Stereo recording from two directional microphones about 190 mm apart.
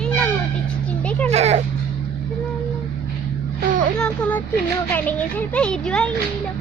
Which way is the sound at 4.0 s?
10° left (ahead or behind).